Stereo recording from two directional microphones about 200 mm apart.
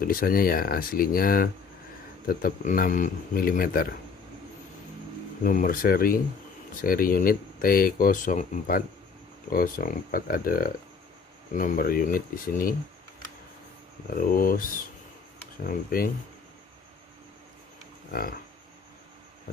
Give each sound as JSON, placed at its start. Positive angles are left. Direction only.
{"t": 0.0, "sound": "speech", "side_deg": 45}
{"t": 5.4, "sound": "speech", "side_deg": 45}
{"t": 14.1, "sound": "speech", "side_deg": 45}
{"t": 15.6, "sound": "speech", "side_deg": 45}